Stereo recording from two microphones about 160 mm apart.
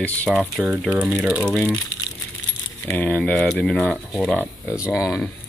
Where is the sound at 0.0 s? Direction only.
10° left (ahead or behind).